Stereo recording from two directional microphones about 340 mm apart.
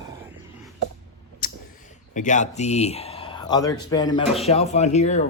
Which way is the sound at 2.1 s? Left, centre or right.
Left.